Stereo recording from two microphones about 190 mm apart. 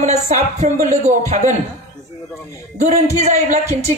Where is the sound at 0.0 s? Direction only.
35° right (ahead or behind).